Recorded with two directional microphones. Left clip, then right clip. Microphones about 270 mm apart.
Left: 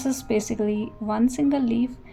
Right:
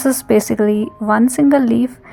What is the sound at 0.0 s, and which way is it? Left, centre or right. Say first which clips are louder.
A woman's voice: right 11 dB; right.